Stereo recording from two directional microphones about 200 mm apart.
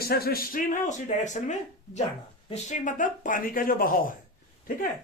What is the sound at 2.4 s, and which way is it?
Speech, 40° left (ahead or behind).